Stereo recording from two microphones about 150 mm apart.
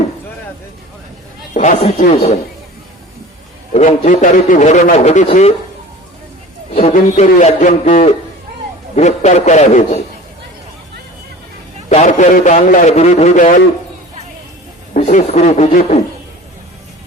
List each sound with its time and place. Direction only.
1.5 s a man's voice: 55° left (ahead or behind)
3.7 s a man's voice: 55° left (ahead or behind)
6.9 s a man's voice: 55° left (ahead or behind)
11.9 s a man's voice: 50° left (ahead or behind)
14.9 s speech: 50° left (ahead or behind)